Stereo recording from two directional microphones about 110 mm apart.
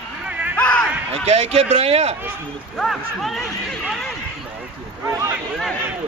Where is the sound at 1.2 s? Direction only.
70° right (ahead or behind).